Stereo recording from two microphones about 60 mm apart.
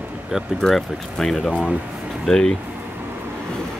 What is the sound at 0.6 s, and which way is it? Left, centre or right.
Speech, centre.